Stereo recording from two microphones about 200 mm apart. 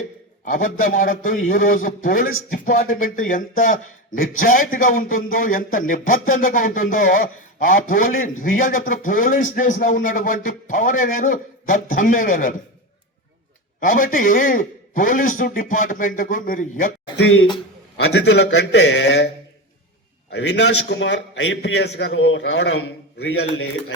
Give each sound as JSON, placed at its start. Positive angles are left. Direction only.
{"t": 0.4, "sound": "a man's voice", "side_deg": 40}
{"t": 13.7, "sound": "a man's voice", "side_deg": 45}
{"t": 17.9, "sound": "a man's voice", "side_deg": 60}
{"t": 20.3, "sound": "a man's voice", "side_deg": 60}